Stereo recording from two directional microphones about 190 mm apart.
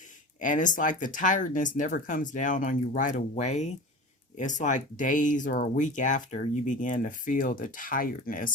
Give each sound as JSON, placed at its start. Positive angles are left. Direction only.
{"t": 0.3, "sound": "speech", "side_deg": 40}